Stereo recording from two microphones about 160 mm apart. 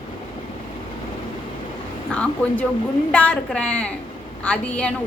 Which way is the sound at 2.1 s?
5° left (ahead or behind).